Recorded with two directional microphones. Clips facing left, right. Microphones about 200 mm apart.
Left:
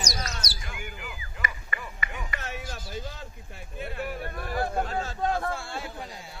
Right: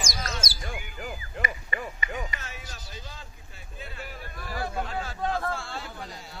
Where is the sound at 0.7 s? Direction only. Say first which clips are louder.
Right 2 dB; 45° right (ahead or behind).